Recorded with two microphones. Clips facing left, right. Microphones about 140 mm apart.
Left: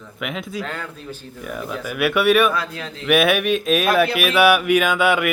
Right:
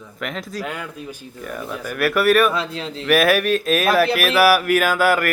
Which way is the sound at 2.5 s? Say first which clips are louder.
Right 1 dB; 25° right (ahead or behind).